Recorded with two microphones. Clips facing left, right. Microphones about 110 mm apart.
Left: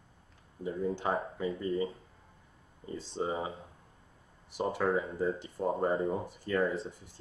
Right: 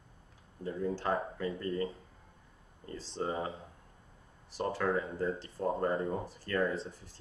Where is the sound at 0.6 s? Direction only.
15° left (ahead or behind).